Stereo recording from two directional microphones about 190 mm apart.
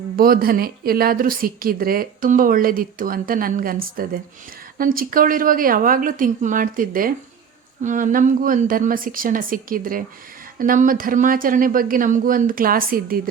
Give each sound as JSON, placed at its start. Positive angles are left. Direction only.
{"t": 0.2, "sound": "speech", "side_deg": -50}